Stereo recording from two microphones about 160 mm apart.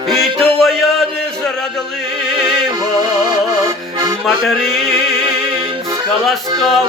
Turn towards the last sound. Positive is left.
turn(degrees=0)  # may be behind; listen again after turning